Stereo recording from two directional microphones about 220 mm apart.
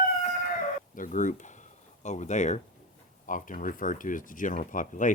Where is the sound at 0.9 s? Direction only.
35° left (ahead or behind).